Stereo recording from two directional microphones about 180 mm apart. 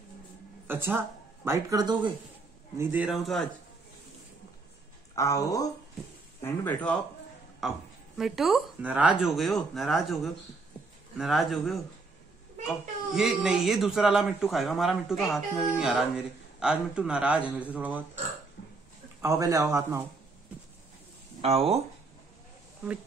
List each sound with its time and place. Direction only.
0.7 s speech: 10° right (ahead or behind)
2.8 s a child's voice: 10° right (ahead or behind)
5.1 s speech: 15° left (ahead or behind)
7.6 s a child's voice: centre (ahead or behind)
19.2 s a man's voice: 15° right (ahead or behind)
21.4 s speech: 35° right (ahead or behind)